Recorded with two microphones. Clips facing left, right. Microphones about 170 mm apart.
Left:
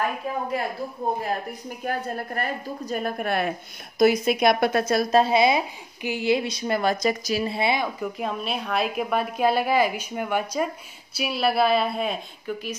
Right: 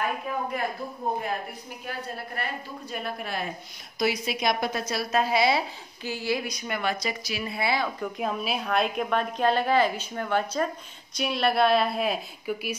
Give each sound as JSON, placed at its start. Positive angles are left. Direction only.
{"t": 1.9, "sound": "a woman's voice", "side_deg": 50}
{"t": 4.0, "sound": "a woman's voice", "side_deg": 50}
{"t": 5.1, "sound": "a woman's voice", "side_deg": 25}
{"t": 7.4, "sound": "a woman's voice", "side_deg": 25}
{"t": 8.0, "sound": "a woman's voice", "side_deg": 0}